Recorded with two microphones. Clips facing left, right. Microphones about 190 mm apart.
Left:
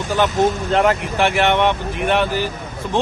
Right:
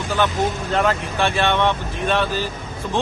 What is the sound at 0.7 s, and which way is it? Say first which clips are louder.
Speech: left 3 dB; 20° left (ahead or behind).